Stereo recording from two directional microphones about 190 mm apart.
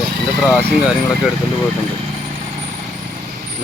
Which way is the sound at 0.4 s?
5° right (ahead or behind).